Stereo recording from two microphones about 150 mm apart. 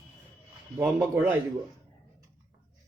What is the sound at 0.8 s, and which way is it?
Speech, 15° right (ahead or behind).